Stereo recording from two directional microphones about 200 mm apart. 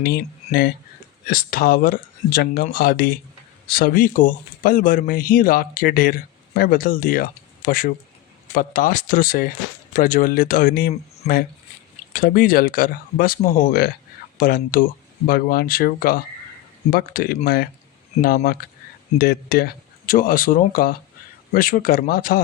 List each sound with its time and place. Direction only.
0.0 s speech: 50° left (ahead or behind)